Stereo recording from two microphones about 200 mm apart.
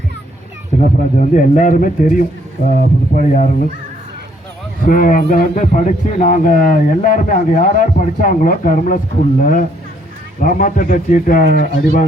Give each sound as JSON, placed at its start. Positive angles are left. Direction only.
{"t": 0.8, "sound": "a man's voice", "side_deg": 40}
{"t": 4.9, "sound": "a man's voice", "side_deg": 40}